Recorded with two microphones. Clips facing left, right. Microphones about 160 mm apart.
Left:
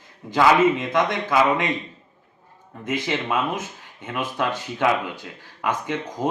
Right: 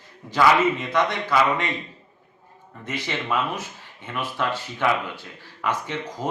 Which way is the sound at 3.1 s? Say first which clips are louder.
Even; 20° left (ahead or behind).